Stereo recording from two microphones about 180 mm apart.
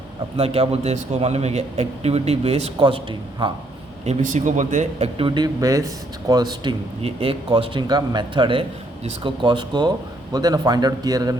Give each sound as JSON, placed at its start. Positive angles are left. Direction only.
{"t": 0.3, "sound": "a man's voice", "side_deg": -35}
{"t": 4.0, "sound": "speech", "side_deg": -40}